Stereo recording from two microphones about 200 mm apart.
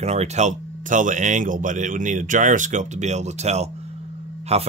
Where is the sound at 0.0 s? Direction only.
35° right (ahead or behind).